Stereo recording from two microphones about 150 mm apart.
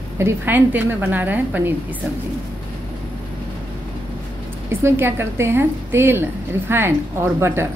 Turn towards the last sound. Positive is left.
turn(degrees=-15)  # may be behind; listen again after turning